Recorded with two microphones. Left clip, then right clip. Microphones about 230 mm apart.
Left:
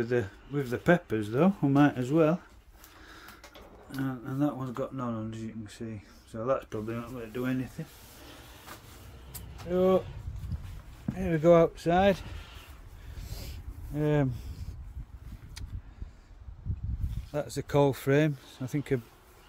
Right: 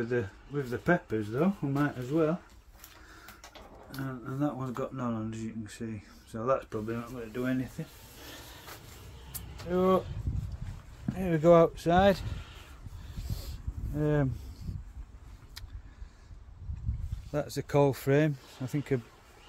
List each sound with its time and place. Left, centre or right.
0.0 s speech: left
4.0 s speech: centre
9.3 s vehicle: centre
11.1 s speech: centre
13.3 s a sound: centre
17.3 s speech: centre